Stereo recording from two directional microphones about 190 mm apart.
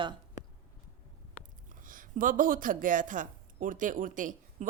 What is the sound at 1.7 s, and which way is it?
Speech, 45° right (ahead or behind).